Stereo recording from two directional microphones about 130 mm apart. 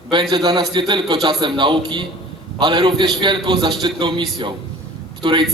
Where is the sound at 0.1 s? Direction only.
35° right (ahead or behind).